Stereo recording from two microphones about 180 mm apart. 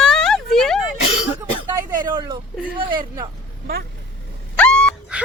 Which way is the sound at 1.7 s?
20° right (ahead or behind).